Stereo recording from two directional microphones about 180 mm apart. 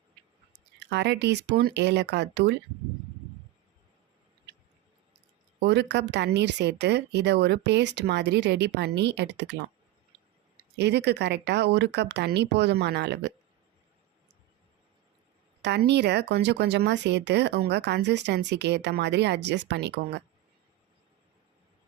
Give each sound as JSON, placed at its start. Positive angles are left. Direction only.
{"t": 0.8, "sound": "speech", "side_deg": -70}
{"t": 5.5, "sound": "speech", "side_deg": -70}
{"t": 10.8, "sound": "speech", "side_deg": -70}
{"t": 15.6, "sound": "speech", "side_deg": -65}